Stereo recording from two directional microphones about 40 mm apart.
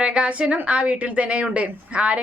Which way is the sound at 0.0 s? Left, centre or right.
Right.